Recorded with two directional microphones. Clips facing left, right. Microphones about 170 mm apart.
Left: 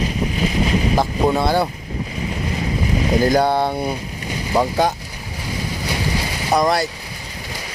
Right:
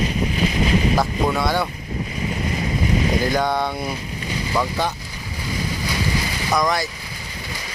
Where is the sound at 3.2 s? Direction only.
35° left (ahead or behind).